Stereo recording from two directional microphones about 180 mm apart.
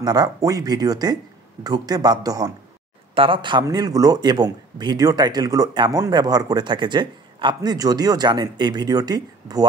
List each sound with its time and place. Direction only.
0.0 s a man's voice: 20° right (ahead or behind)